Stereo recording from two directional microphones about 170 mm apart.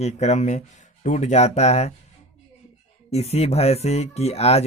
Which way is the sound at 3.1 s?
40° left (ahead or behind).